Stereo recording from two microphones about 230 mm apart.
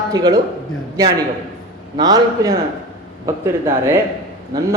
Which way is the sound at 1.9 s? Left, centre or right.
Centre.